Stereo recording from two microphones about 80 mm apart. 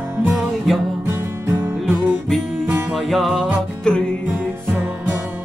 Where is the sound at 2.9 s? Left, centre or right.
Centre.